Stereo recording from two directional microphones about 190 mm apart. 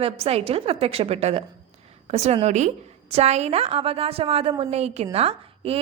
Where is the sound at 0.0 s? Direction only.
30° right (ahead or behind).